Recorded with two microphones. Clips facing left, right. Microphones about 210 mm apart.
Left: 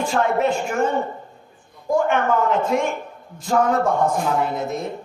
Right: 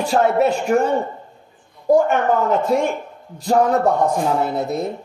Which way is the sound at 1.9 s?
40° right (ahead or behind).